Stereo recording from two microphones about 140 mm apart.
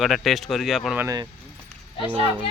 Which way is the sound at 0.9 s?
25° right (ahead or behind).